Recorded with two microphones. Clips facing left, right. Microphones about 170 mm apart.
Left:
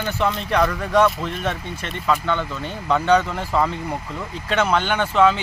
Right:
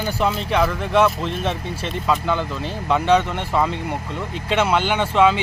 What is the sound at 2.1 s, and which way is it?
Speech, 5° right (ahead or behind).